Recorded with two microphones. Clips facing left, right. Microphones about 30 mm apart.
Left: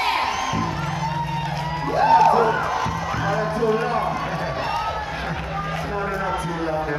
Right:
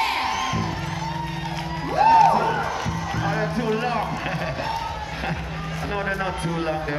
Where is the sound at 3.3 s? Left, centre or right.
Centre.